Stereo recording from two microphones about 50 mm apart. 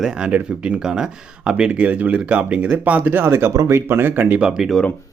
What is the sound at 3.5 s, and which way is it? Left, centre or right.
Speech, right.